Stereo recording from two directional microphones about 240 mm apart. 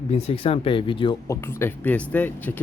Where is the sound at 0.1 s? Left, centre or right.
Left.